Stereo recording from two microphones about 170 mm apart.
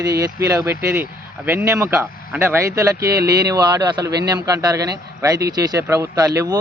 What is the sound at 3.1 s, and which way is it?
Speech, 70° right (ahead or behind).